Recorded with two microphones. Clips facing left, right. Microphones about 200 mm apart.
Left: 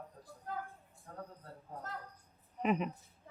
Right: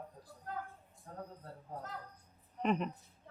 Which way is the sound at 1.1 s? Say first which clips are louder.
Right 1 dB; 30° right (ahead or behind).